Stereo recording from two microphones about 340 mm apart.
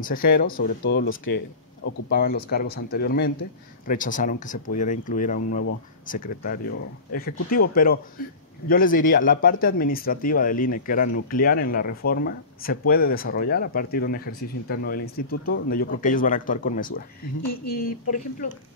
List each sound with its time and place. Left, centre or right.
0.0 s speech: left
17.4 s a sound: left
17.8 s speech: left